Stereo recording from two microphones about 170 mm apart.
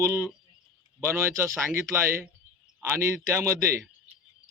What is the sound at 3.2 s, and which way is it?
Speech, 15° right (ahead or behind).